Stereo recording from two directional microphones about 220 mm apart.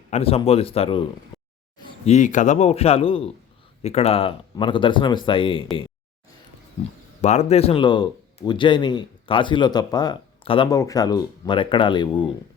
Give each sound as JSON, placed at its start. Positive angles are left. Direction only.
{"t": 0.1, "sound": "speech", "side_deg": 25}
{"t": 1.3, "sound": "a sound", "side_deg": 15}
{"t": 2.0, "sound": "speech", "side_deg": 35}
{"t": 7.2, "sound": "speech", "side_deg": 30}